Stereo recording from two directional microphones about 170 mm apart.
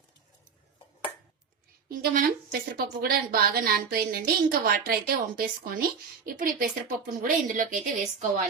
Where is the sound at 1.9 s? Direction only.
60° right (ahead or behind).